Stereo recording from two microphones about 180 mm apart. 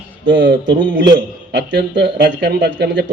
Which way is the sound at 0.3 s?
90° right.